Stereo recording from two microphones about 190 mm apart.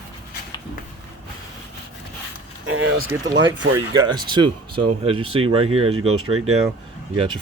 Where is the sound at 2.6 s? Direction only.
90° right.